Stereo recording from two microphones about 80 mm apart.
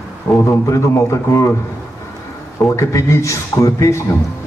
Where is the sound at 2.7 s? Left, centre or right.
Left.